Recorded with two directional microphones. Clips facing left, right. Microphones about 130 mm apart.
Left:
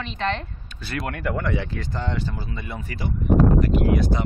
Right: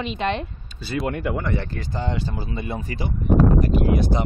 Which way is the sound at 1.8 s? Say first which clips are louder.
Right 1 dB; 10° right (ahead or behind).